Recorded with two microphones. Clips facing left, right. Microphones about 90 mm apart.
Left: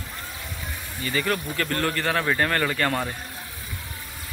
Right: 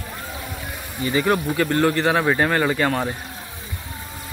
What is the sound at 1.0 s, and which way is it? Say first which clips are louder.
Speech: right 6 dB; 20° right (ahead or behind).